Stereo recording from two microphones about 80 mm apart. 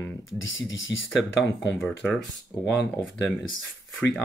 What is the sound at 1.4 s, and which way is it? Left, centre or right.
Speech, left.